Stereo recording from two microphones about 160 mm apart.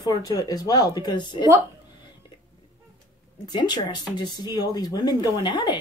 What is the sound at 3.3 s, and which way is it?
Speech, 25° left (ahead or behind).